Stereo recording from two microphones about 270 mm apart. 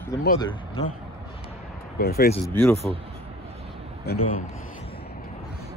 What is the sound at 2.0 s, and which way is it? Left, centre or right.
Speech, left.